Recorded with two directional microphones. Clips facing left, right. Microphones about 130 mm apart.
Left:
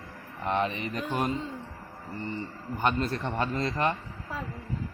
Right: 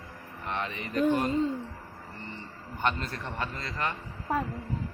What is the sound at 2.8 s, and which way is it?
A man's voice, 25° left (ahead or behind).